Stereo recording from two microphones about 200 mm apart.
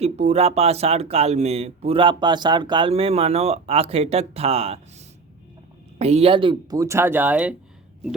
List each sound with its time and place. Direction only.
0.0 s speech: 30° right (ahead or behind); by 7.5 s 10° right (ahead or behind)